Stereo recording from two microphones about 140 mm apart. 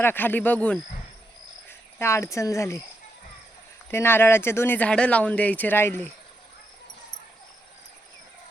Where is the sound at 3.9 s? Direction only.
15° left (ahead or behind).